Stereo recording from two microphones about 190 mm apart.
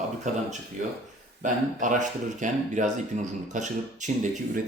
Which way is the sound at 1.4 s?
40° right (ahead or behind).